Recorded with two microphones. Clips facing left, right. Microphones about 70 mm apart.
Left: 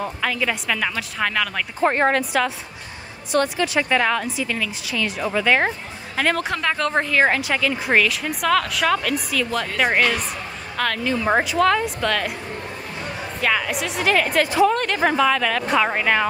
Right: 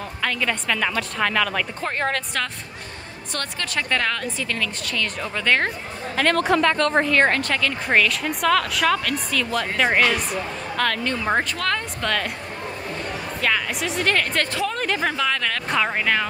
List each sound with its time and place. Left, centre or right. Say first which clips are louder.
0.0 s speech: left 2 dB; centre
1.9 s speech: left 8 dB; left
2.1 s a woman's voice: left 6 dB; centre
13.4 s a woman's voice: left 2 dB; centre